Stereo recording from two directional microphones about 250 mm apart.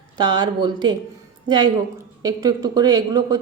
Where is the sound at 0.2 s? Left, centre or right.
Centre.